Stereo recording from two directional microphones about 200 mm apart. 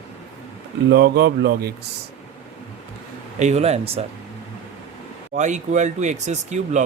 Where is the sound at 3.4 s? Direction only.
35° right (ahead or behind).